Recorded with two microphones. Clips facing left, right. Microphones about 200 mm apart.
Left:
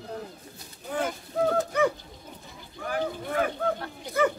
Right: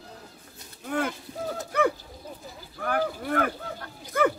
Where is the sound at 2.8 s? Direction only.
60° right (ahead or behind).